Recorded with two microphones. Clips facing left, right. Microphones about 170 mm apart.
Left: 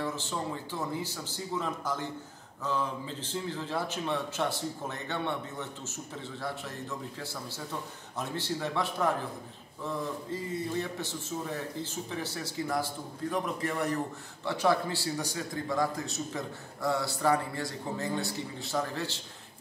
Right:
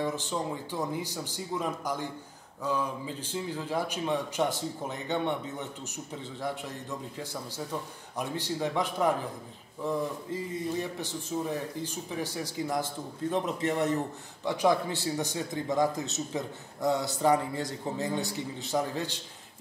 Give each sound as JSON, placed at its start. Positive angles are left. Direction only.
{"t": 0.0, "sound": "a man's voice", "side_deg": -15}
{"t": 8.2, "sound": "a man's voice", "side_deg": -15}